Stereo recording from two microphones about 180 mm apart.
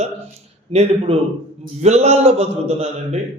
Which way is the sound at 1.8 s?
35° right (ahead or behind).